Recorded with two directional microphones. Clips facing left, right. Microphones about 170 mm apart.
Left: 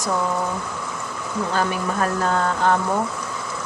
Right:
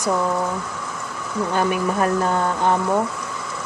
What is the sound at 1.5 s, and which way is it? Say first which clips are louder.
Speech: right 3 dB; 15° right (ahead or behind).